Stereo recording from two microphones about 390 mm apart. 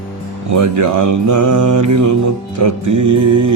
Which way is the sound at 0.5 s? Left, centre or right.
Right.